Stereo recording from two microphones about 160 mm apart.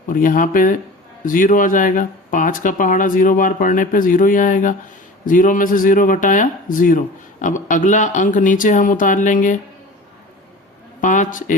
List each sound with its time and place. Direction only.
0.1 s speech: 55° left (ahead or behind)
11.0 s a man's voice: 55° left (ahead or behind)